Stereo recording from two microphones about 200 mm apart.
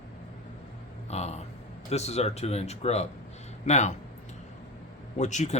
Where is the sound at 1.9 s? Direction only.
35° left (ahead or behind).